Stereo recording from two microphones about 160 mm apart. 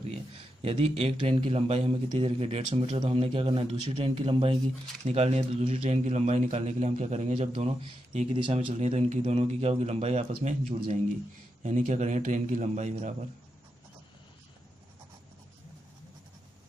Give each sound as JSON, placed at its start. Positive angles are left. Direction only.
{"t": 0.6, "sound": "a man's voice", "side_deg": -35}
{"t": 8.6, "sound": "a man's voice", "side_deg": -40}
{"t": 11.6, "sound": "a man's voice", "side_deg": -50}